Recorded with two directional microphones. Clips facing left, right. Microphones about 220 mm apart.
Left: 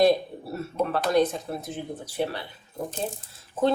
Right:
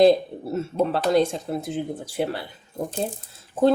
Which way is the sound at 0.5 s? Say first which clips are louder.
Right 4 dB; 25° right (ahead or behind).